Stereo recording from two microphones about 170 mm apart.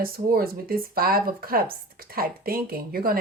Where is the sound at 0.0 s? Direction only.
60° right (ahead or behind).